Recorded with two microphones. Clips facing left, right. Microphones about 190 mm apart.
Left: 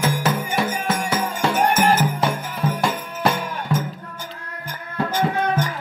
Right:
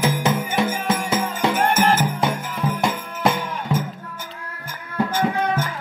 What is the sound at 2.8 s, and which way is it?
Jingle bell, 15° right (ahead or behind).